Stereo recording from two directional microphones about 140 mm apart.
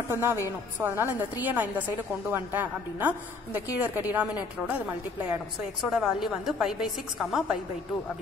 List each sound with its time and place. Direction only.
0.1 s a woman's voice: 15° right (ahead or behind); by 7.5 s centre (ahead or behind)